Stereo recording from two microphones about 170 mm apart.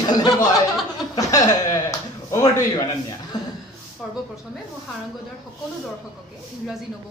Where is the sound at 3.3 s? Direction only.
20° left (ahead or behind).